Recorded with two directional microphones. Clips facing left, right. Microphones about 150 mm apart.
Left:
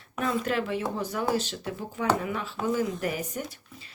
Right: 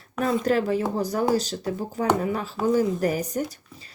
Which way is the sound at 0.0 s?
40° right (ahead or behind).